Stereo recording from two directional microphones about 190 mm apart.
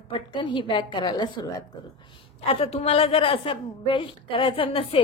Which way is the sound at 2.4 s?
30° left (ahead or behind).